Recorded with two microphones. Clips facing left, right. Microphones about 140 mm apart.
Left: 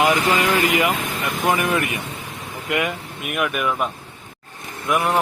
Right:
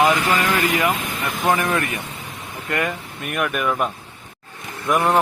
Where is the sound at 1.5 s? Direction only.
15° left (ahead or behind).